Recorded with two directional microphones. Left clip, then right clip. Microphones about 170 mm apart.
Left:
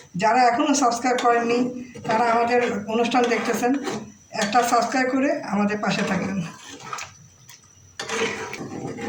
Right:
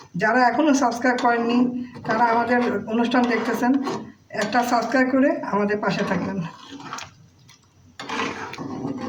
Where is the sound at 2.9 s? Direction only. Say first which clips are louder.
Left 1 dB; 40° right (ahead or behind).